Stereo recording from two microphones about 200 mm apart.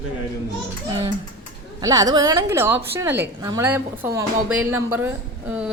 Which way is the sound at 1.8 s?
20° right (ahead or behind).